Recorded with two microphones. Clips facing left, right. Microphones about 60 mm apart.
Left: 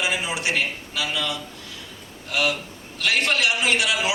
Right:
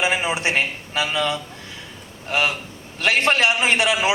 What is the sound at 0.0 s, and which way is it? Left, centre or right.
A man's voice, right.